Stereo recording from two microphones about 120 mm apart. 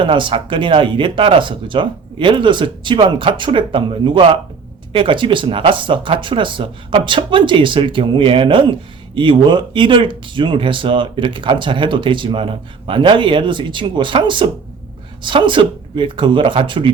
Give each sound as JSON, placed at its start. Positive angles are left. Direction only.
{"t": 0.0, "sound": "speech", "side_deg": -45}